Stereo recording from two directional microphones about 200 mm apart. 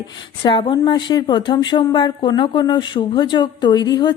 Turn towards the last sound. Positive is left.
turn(degrees=20)  # may be behind; listen again after turning